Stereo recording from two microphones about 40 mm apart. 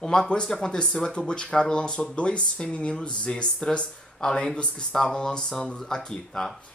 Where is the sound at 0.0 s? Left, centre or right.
Centre.